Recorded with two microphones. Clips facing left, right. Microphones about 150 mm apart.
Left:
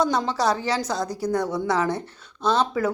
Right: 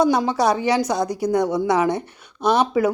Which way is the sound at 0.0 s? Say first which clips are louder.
Right 4 dB; 10° right (ahead or behind).